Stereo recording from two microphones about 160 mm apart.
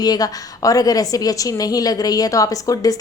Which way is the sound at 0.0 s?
25° left (ahead or behind).